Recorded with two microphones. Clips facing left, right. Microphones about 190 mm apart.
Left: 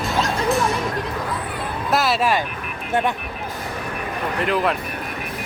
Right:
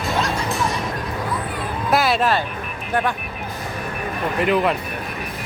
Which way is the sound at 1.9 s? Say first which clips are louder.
Right 1 dB; centre (ahead or behind).